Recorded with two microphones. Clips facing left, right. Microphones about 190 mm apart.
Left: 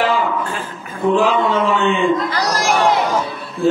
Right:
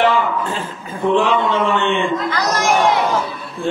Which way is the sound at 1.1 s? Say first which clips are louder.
Even; 5° left (ahead or behind).